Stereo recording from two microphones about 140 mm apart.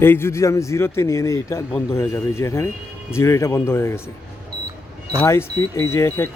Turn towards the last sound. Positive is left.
turn(degrees=20)  # may be behind; listen again after turning